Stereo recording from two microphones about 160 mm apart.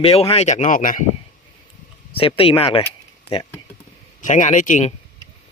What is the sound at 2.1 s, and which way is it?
Speech, 35° left (ahead or behind).